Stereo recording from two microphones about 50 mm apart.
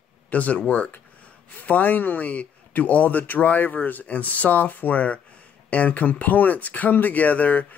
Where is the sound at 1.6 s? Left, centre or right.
Left.